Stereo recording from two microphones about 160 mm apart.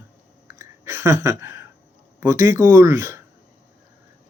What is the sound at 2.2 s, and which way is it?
Speech, 20° right (ahead or behind).